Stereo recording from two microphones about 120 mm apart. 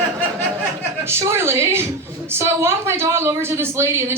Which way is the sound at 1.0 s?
20° right (ahead or behind).